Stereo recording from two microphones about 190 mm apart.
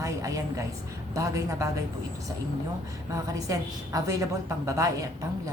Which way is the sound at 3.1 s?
15° right (ahead or behind).